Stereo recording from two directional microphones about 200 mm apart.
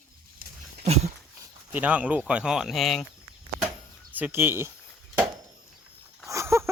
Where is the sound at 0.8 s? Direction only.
30° right (ahead or behind).